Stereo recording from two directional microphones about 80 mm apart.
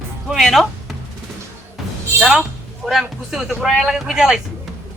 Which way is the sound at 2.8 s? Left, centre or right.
Centre.